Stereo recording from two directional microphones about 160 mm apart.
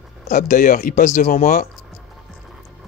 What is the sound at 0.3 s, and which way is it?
Speech, 55° left (ahead or behind).